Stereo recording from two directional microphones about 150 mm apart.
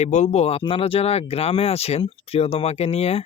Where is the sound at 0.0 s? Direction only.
50° left (ahead or behind).